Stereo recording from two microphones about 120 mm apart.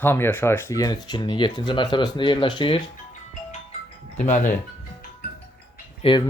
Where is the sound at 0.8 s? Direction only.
30° left (ahead or behind).